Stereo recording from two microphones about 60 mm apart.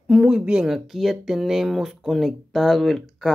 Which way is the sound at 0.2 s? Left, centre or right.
Centre.